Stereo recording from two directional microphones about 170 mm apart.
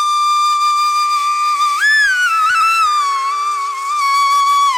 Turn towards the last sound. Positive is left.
turn(degrees=0)  # may be behind; listen again after turning